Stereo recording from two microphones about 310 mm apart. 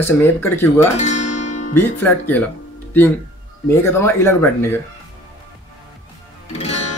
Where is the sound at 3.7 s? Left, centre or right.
Centre.